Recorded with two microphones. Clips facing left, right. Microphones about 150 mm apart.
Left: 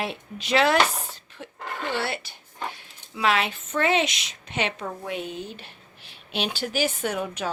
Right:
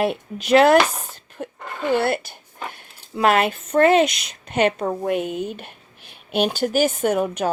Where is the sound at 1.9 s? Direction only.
50° right (ahead or behind).